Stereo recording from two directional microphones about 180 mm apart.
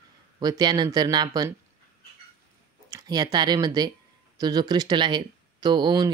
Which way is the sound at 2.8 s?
20° right (ahead or behind).